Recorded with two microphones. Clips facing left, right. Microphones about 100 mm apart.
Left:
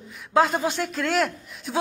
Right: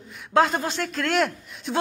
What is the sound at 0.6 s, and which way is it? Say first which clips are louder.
A man's voice: left 1 dB; 10° left (ahead or behind).